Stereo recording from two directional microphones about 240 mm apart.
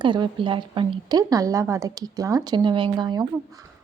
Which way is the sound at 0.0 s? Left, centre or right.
Centre.